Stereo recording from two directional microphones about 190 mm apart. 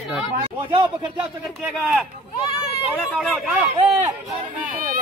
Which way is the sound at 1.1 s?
5° right (ahead or behind).